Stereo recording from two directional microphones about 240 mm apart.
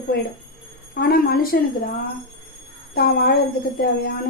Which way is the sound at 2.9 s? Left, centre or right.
Left.